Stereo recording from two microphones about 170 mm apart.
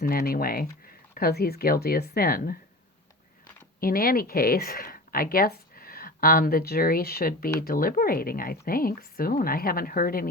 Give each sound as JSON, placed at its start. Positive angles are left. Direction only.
{"t": 0.0, "sound": "a woman's voice", "side_deg": 60}
{"t": 3.8, "sound": "a woman's voice", "side_deg": 60}